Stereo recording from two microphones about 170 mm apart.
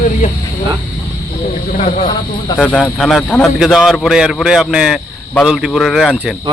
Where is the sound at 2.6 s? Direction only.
10° left (ahead or behind).